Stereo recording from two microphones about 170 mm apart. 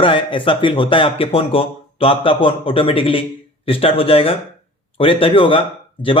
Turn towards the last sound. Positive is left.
turn(degrees=30)  # may be behind; listen again after turning